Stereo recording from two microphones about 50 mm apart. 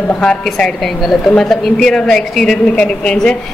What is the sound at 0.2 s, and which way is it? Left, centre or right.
A woman's voice, centre.